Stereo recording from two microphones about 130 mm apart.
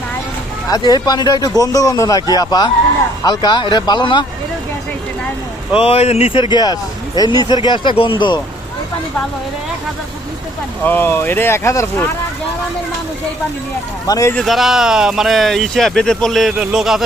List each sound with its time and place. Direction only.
0.7 s speech: 30° left (ahead or behind)
5.8 s speech: 50° left (ahead or behind)
10.8 s speech: 15° left (ahead or behind)
14.1 s speech: 25° left (ahead or behind)
14.3 s speech: centre (ahead or behind)